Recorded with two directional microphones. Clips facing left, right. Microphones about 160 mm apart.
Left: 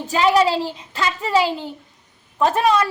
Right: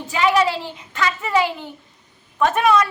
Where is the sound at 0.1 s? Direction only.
35° left (ahead or behind).